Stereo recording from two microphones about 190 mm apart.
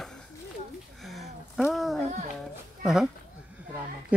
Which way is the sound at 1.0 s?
Centre (ahead or behind).